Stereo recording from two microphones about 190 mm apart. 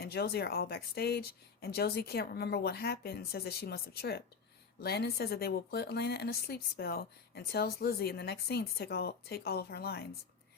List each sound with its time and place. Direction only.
0.0 s a woman's voice: 55° left (ahead or behind)